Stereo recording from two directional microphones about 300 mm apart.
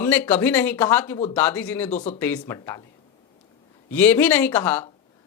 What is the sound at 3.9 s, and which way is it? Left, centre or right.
Speech, centre.